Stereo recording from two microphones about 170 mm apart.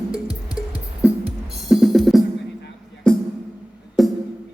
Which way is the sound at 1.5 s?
Centre (ahead or behind).